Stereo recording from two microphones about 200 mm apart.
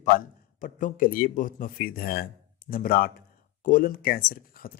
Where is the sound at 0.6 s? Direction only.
40° left (ahead or behind).